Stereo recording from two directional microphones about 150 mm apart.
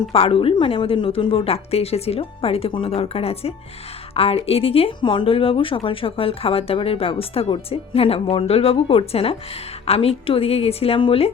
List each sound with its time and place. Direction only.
0.1 s speech: 40° left (ahead or behind)